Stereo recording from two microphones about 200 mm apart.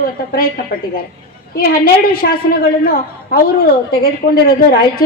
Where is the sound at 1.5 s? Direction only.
50° left (ahead or behind).